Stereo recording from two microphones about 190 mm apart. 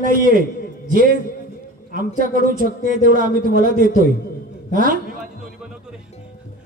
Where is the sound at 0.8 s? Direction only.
50° right (ahead or behind).